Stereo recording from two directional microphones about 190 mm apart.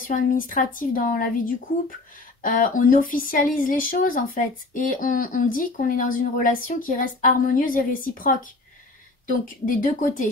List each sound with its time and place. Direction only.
0.0 s speech: 45° left (ahead or behind)
9.7 s speech: 45° left (ahead or behind)